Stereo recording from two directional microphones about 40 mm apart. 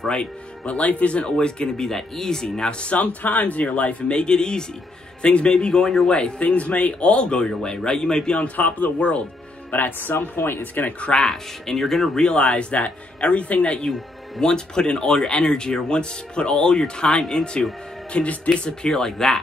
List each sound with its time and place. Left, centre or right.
0.1 s speech: left
1.9 s speech: centre
2.9 s speech: left
3.6 s speech: left
6.4 s speech: left; by 8.4 s centre
8.5 s speech: left
9.7 s speech: left
11.0 s speech: left
12.3 s speech: left
18.1 s speech: left; by 19.3 s centre